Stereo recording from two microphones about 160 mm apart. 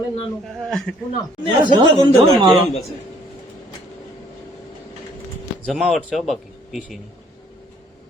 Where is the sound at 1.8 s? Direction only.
30° right (ahead or behind).